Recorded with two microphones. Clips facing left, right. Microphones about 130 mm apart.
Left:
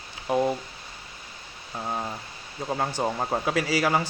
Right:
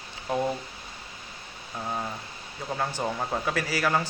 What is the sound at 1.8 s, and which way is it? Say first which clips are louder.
Speech: left 1 dB; 15° left (ahead or behind).